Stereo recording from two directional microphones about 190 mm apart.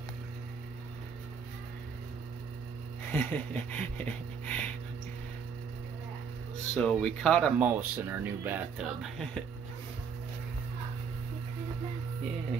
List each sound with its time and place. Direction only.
3.1 s a sound: 10° left (ahead or behind)
6.7 s speech: 5° left (ahead or behind)
7.5 s speech: 5° right (ahead or behind)